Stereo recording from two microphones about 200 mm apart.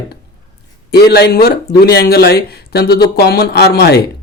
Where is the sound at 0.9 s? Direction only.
50° left (ahead or behind).